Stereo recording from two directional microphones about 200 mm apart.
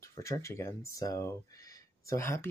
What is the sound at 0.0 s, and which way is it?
Speech, 15° left (ahead or behind).